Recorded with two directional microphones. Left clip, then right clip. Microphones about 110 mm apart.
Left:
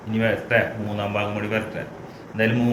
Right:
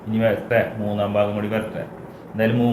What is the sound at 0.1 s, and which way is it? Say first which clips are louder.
A man's voice: right 2 dB; 30° right (ahead or behind).